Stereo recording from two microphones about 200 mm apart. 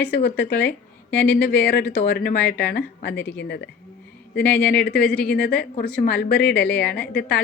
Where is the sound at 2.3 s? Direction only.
10° left (ahead or behind).